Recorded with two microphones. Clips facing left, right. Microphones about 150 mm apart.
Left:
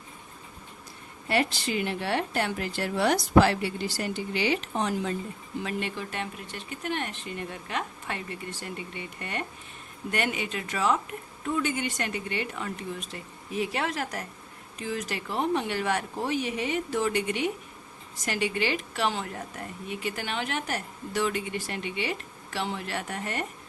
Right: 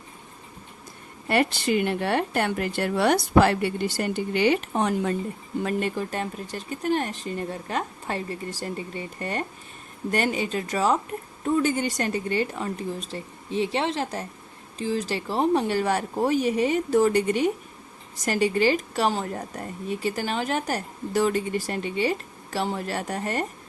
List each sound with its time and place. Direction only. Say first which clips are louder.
1.3 s a woman's voice: right 5 dB; 55° right (ahead or behind)
5.5 s a woman's voice: right 6 dB; 45° right (ahead or behind)